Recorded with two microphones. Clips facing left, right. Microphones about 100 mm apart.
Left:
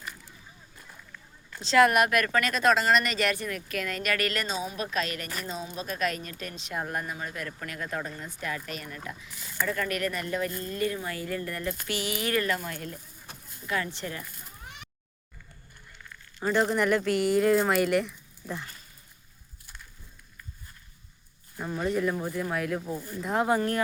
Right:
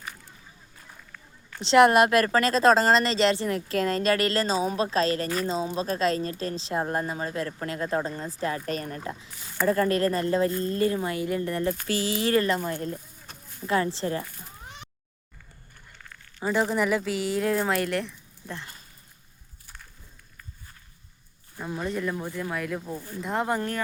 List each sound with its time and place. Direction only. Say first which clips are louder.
1.6 s a woman's voice: right 4 dB; 25° right (ahead or behind)
16.4 s speech: even; 10° right (ahead or behind)
21.6 s speech: left 2 dB; centre (ahead or behind)